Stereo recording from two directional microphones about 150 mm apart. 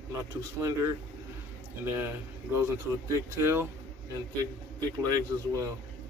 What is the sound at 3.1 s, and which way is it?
Speech, 15° right (ahead or behind).